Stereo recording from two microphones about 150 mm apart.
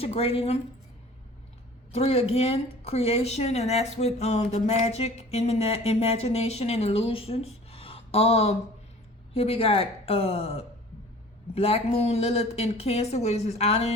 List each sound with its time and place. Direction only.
0.0 s speech: 40° left (ahead or behind)
1.9 s a woman's voice: 40° left (ahead or behind)